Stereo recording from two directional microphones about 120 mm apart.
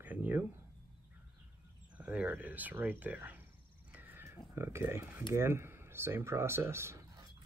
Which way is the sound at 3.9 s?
15° right (ahead or behind).